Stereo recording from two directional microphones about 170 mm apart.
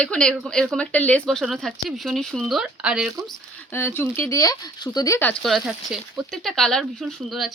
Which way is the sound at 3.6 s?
15° left (ahead or behind).